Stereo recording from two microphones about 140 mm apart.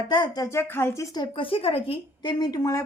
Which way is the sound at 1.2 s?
40° left (ahead or behind).